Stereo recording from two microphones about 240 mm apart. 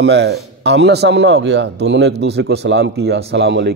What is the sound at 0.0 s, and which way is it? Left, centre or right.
A man's voice, right.